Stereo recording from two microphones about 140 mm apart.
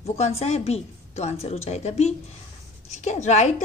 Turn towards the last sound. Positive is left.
turn(degrees=55)  # may be behind; listen again after turning